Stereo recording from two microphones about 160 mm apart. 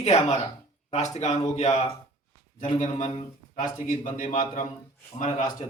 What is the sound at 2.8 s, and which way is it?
A man's voice, 45° left (ahead or behind).